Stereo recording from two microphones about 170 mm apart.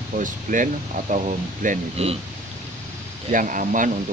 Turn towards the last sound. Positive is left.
turn(degrees=-50)  # may be behind; listen again after turning